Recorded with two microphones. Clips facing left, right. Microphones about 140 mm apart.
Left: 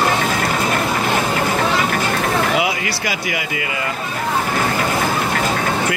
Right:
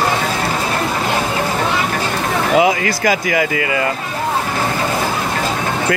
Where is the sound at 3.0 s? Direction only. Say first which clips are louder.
Right 7 dB; 45° right (ahead or behind).